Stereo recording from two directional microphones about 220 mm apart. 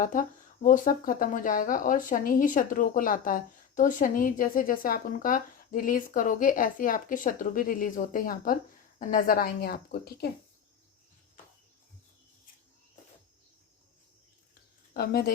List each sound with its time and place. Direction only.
0.0 s speech: 40° left (ahead or behind)
14.9 s speech: 45° left (ahead or behind)